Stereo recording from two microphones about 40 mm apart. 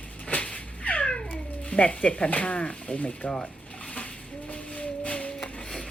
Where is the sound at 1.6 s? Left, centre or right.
Left.